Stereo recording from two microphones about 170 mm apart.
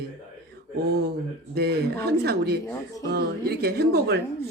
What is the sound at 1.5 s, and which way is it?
Speech, 70° right (ahead or behind).